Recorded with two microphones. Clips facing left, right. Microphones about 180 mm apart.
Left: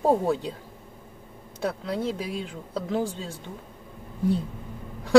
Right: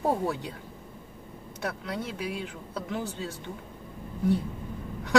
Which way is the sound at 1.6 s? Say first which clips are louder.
Left 6 dB; 30° left (ahead or behind).